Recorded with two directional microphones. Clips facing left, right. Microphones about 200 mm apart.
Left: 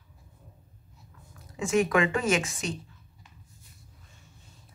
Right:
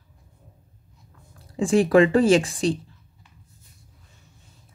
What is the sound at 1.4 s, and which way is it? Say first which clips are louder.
Speech: right 5 dB; 30° right (ahead or behind).